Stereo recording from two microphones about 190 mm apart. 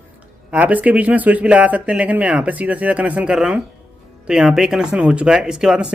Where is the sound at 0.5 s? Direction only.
10° right (ahead or behind).